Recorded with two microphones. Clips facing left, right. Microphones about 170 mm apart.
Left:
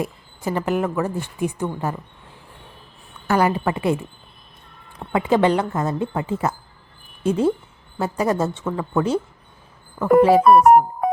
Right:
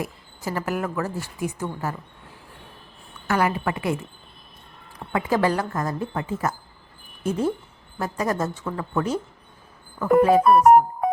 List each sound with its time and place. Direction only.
0.0 s speech: 25° left (ahead or behind)
3.2 s speech: 30° left (ahead or behind)
5.1 s speech: 25° left (ahead or behind)